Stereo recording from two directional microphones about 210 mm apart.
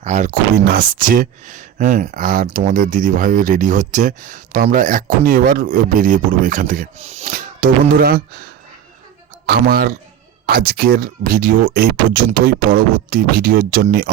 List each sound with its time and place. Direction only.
0.0 s speech: 35° right (ahead or behind)
0.5 s speech: 50° right (ahead or behind)